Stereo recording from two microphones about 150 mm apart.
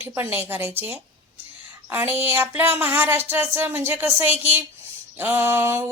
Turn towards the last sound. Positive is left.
turn(degrees=-20)  # may be behind; listen again after turning